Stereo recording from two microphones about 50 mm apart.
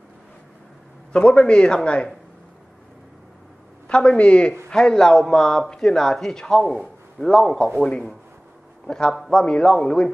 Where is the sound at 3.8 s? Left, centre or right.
Left.